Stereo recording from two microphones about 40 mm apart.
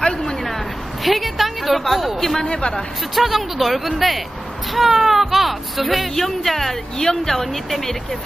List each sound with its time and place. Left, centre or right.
0.0 s a sound: centre
1.0 s a woman's voice: centre
2.4 s speech: left
3.2 s speech: centre